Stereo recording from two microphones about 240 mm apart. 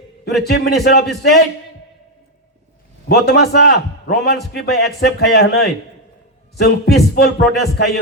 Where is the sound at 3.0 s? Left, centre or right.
Left.